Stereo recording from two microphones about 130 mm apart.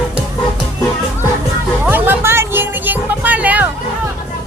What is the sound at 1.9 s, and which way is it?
Music, 20° right (ahead or behind).